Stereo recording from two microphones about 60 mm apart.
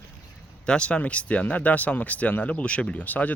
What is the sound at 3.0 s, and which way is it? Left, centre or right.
Speech, left.